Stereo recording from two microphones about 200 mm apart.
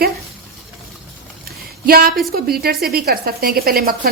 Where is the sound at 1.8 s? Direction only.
45° right (ahead or behind).